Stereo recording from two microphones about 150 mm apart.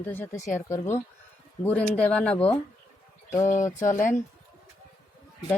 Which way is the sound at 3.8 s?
60° left (ahead or behind).